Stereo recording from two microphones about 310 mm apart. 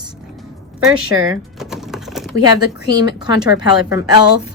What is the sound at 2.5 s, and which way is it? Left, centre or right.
Speech, centre.